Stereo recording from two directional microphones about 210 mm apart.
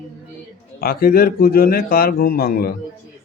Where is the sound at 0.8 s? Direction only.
45° left (ahead or behind).